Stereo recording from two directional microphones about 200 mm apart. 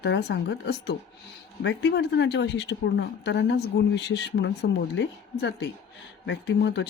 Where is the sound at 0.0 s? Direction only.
60° left (ahead or behind).